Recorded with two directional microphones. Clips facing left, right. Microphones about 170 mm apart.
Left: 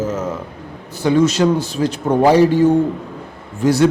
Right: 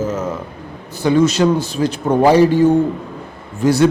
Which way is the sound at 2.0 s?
30° right (ahead or behind).